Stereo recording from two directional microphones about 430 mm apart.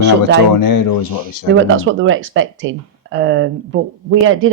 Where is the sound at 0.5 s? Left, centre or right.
Left.